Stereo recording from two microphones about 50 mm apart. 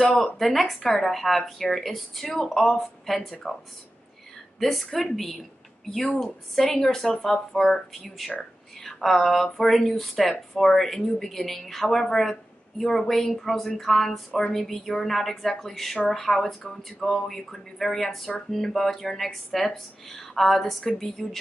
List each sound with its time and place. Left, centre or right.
0.2 s speech: centre
4.6 s speech: centre